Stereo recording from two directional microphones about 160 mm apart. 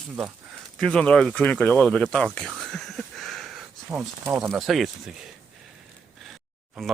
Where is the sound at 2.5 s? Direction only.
Centre (ahead or behind).